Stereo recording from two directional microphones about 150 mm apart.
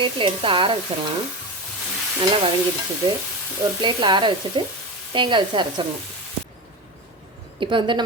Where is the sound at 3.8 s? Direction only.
30° right (ahead or behind).